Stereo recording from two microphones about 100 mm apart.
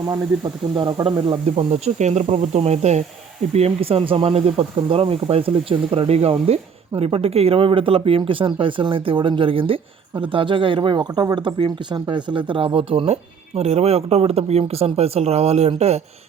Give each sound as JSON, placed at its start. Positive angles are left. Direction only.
{"t": 1.5, "sound": "speech", "side_deg": -90}
{"t": 13.6, "sound": "speech", "side_deg": -90}